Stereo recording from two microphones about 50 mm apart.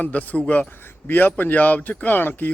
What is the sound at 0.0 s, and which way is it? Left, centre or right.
Speech, left.